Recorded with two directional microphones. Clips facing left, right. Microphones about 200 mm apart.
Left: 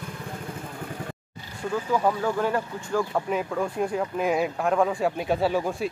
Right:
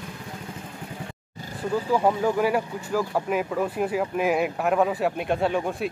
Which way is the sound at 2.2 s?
10° right (ahead or behind).